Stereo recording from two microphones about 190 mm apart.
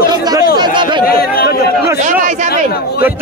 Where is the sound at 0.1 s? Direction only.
20° right (ahead or behind).